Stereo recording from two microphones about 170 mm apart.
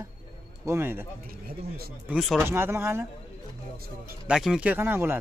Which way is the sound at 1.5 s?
65° right (ahead or behind).